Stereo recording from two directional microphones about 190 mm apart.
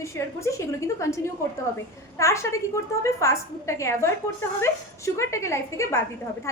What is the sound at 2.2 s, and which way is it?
Speech, 15° left (ahead or behind).